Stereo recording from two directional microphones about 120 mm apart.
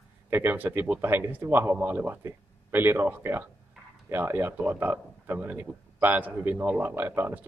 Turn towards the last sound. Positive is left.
turn(degrees=-20)  # may be behind; listen again after turning